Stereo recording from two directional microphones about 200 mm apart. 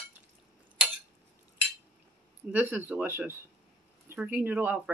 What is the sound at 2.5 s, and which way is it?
Speech, 10° right (ahead or behind).